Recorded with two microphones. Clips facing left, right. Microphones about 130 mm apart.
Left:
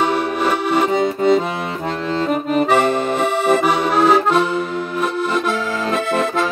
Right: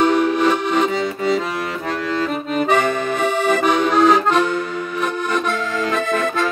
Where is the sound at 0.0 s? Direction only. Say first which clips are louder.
Right 3 dB; 10° left (ahead or behind).